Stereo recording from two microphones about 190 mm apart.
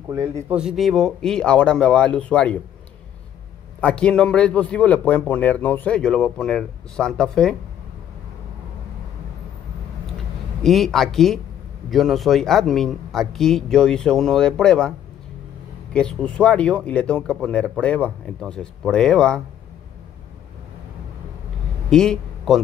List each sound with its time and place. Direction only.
0.1 s a man's voice: 5° right (ahead or behind)
3.8 s a man's voice: 5° left (ahead or behind)
10.6 s a man's voice: centre (ahead or behind)
21.9 s a man's voice: 5° left (ahead or behind)